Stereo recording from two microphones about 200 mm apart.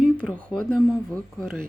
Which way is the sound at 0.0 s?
5° left (ahead or behind).